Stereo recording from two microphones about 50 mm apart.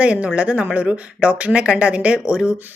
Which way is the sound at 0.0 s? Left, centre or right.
Right.